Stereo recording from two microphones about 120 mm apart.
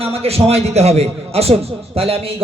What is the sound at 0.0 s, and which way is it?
A man's voice, 55° right (ahead or behind).